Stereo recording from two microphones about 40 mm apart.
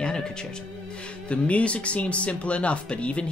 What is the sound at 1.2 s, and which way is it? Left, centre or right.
Speech, left.